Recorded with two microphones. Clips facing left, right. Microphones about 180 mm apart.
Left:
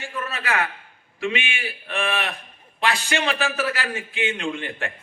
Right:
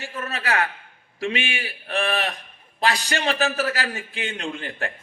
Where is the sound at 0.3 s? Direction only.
40° right (ahead or behind).